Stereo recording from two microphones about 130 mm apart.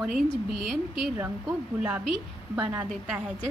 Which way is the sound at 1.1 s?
15° right (ahead or behind).